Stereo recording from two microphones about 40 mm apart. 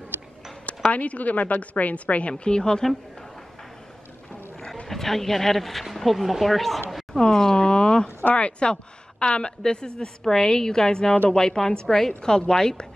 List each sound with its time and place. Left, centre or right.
0.7 s a woman's voice: left
2.3 s a woman's voice: left
4.8 s speech: centre
7.2 s speech: centre
8.2 s a woman's voice: left
8.5 s a woman's voice: left